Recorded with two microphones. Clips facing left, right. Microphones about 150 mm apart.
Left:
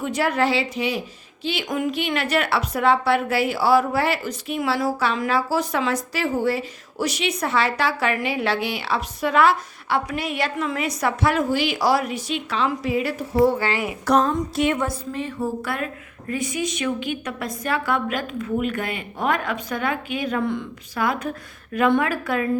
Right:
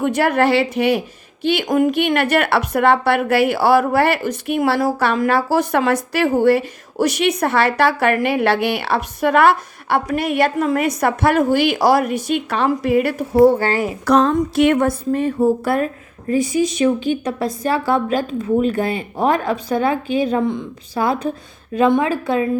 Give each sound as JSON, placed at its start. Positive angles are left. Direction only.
{"t": 0.0, "sound": "a woman's voice", "side_deg": -60}
{"t": 14.1, "sound": "a sound", "side_deg": -90}
{"t": 14.3, "sound": "a woman's voice", "side_deg": -65}
{"t": 20.4, "sound": "speech", "side_deg": -20}
{"t": 20.9, "sound": "a woman's voice", "side_deg": -30}